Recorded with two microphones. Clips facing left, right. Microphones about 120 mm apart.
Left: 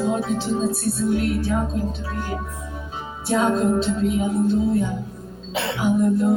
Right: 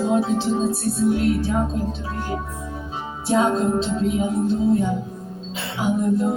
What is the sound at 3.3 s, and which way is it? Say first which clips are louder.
Music: even; 25° right (ahead or behind).